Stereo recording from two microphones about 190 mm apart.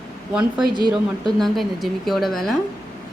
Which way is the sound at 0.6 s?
20° right (ahead or behind).